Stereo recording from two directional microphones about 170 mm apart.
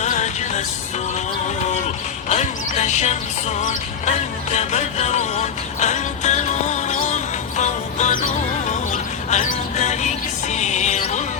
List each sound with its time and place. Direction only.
0.0 s music: 45° left (ahead or behind)
2.3 s a sound: 40° left (ahead or behind)
3.6 s music: 45° left (ahead or behind)